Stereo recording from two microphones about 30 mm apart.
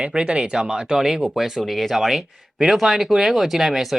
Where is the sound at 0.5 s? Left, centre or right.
Right.